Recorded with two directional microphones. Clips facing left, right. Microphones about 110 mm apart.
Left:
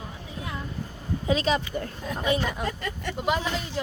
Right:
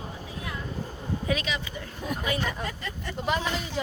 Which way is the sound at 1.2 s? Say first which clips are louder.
Left 7 dB; 35° left (ahead or behind).